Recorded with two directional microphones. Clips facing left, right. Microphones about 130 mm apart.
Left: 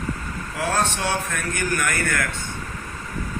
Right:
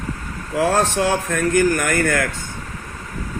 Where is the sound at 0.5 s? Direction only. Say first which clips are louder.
Right 7 dB; 90° right.